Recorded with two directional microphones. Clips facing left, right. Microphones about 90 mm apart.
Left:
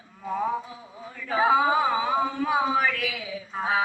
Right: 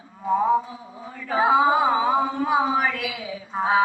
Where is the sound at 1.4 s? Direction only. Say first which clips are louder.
Right 3 dB; 20° right (ahead or behind).